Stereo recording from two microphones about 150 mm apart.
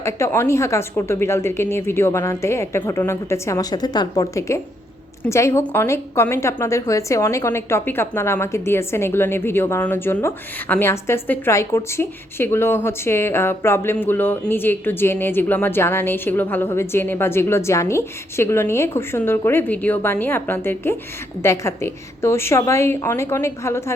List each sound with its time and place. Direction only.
0.0 s a woman's voice: 15° left (ahead or behind)